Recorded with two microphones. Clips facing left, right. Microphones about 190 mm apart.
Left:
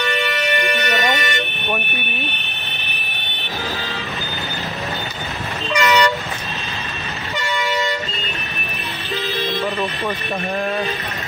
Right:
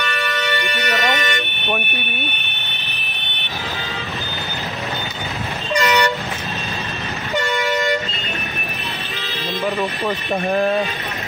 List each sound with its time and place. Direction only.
0.0 s music: 20° left (ahead or behind)
5.8 s toot: 35° right (ahead or behind)